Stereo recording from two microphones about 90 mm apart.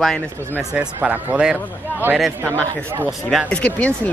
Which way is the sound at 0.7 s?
15° right (ahead or behind).